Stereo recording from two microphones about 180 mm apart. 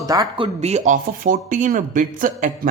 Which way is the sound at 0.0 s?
20° right (ahead or behind).